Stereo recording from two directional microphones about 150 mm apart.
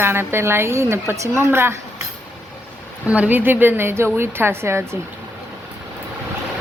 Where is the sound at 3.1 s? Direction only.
10° right (ahead or behind).